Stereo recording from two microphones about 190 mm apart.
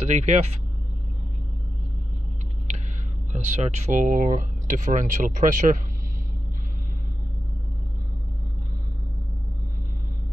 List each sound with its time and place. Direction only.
0.0 s speech: 35° right (ahead or behind)
3.4 s speech: 35° right (ahead or behind)